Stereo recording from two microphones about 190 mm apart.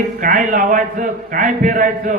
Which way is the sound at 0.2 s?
45° right (ahead or behind).